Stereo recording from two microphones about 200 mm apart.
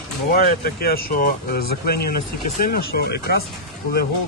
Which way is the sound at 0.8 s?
45° left (ahead or behind).